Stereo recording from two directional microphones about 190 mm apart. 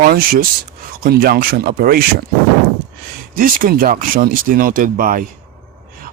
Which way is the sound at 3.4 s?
50° right (ahead or behind).